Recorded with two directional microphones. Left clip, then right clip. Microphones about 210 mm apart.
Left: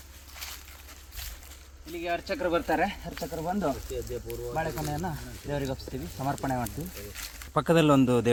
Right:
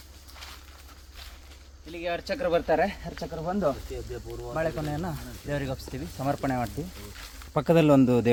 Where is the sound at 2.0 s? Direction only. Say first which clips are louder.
Right 1 dB; 20° right (ahead or behind).